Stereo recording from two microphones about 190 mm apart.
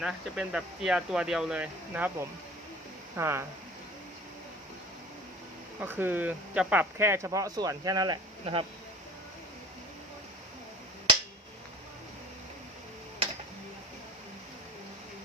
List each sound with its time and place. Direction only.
0.0 s speech: 5° right (ahead or behind)
5.8 s speech: 10° right (ahead or behind)